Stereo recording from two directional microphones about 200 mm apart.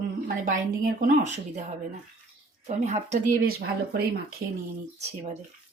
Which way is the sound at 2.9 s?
35° right (ahead or behind).